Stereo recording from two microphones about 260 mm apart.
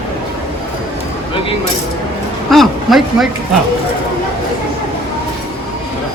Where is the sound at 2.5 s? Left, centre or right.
Centre.